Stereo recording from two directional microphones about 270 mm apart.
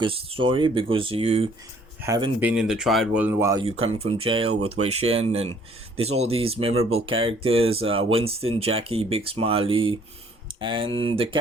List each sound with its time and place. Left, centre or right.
0.0 s speech: centre
2.4 s speech: centre